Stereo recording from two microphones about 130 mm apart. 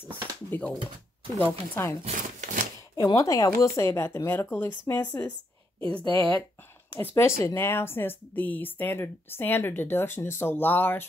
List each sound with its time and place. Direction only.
0.5 s speech: 10° left (ahead or behind)
2.0 s a sound: 80° right
3.0 s speech: 25° left (ahead or behind)